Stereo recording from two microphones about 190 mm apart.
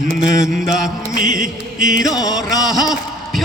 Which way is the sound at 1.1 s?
45° right (ahead or behind).